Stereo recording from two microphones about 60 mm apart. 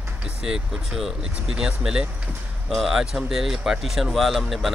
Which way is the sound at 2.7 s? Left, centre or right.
Centre.